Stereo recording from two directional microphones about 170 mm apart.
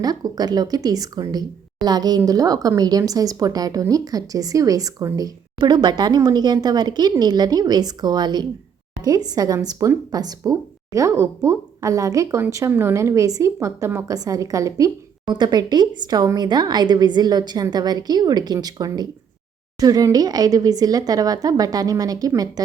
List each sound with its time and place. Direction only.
0.0 s speech: 20° right (ahead or behind)